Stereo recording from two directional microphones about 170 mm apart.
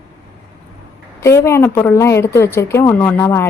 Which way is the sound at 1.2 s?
15° left (ahead or behind).